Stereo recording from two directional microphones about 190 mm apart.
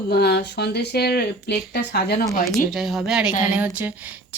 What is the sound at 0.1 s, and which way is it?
Speech, 60° left (ahead or behind).